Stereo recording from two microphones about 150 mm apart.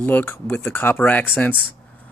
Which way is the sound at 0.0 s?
15° left (ahead or behind).